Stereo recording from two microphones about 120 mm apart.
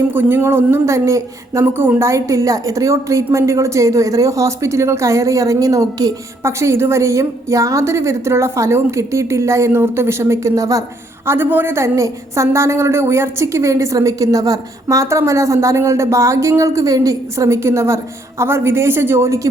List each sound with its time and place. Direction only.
0.1 s a woman's voice: 20° right (ahead or behind)
11.3 s a woman's voice: 15° right (ahead or behind)